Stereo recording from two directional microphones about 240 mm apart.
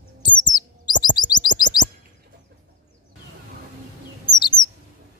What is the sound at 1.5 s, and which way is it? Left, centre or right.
Chirp, left.